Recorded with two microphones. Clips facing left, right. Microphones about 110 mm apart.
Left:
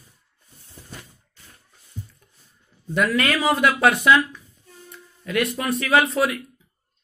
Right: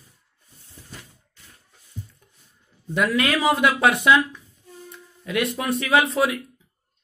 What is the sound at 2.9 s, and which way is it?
A man's voice, 15° right (ahead or behind).